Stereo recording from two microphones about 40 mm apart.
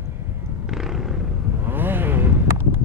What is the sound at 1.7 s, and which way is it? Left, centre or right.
Vehicle, right.